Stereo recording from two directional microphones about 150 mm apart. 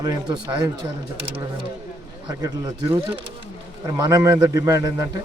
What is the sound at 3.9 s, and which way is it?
A man's voice, 20° right (ahead or behind).